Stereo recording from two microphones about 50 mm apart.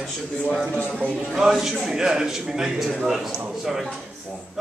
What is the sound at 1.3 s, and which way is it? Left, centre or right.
Speech, centre.